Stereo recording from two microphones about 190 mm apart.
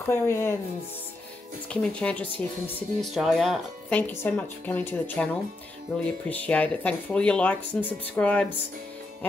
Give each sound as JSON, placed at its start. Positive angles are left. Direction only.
{"t": 0.0, "sound": "speech", "side_deg": 15}
{"t": 1.7, "sound": "speech", "side_deg": 5}